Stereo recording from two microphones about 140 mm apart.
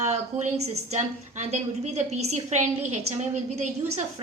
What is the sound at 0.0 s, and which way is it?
A woman's voice, 55° right (ahead or behind).